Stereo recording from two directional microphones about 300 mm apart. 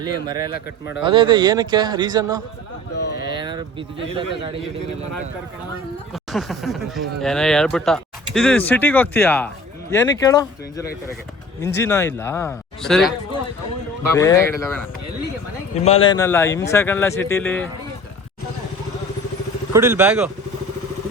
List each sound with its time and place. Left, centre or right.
0.0 s a man's voice: centre
0.5 s speech: left
1.0 s a man's voice: centre
2.9 s speech: left
3.2 s a sound: centre
4.4 s speech: centre
6.3 s speech: centre
15.8 s speech: centre
19.7 s a man's voice: centre